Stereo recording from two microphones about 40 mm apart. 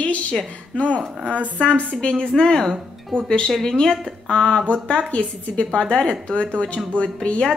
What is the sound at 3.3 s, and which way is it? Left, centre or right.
A woman's voice, centre.